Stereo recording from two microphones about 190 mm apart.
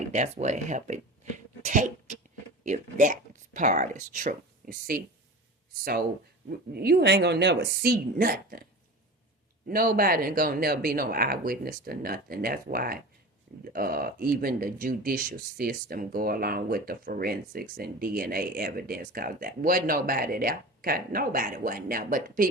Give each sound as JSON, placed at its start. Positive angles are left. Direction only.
{"t": 0.1, "sound": "speech", "side_deg": -40}
{"t": 6.7, "sound": "a woman's voice", "side_deg": -55}
{"t": 9.6, "sound": "speech", "side_deg": -50}